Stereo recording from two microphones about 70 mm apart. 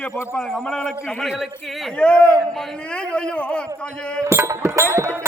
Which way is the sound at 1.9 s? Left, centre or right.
Centre.